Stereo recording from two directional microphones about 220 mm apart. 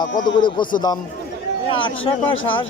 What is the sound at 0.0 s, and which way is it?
Speech, 20° left (ahead or behind).